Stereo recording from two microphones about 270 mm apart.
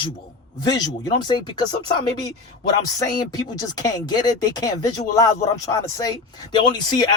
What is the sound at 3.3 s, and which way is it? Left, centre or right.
Speech, centre.